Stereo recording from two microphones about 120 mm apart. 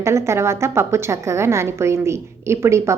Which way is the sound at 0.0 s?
25° right (ahead or behind).